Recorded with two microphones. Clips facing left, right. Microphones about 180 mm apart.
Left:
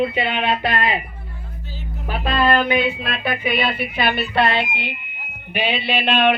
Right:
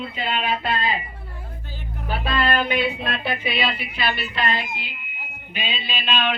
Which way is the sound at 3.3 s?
50° left (ahead or behind).